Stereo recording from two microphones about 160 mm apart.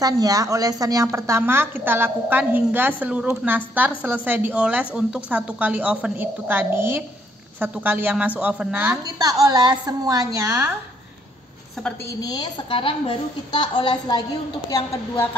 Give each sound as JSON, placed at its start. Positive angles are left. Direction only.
{"t": 0.0, "sound": "a woman's voice", "side_deg": -25}
{"t": 9.0, "sound": "a woman's voice", "side_deg": -25}
{"t": 12.2, "sound": "a woman's voice", "side_deg": 25}